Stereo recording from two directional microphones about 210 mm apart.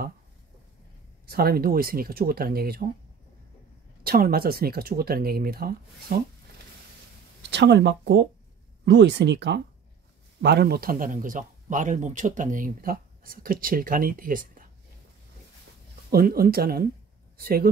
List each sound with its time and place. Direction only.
1.2 s speech: 45° right (ahead or behind)
4.0 s speech: 45° right (ahead or behind)
7.5 s speech: 55° right (ahead or behind)
16.1 s speech: 45° right (ahead or behind)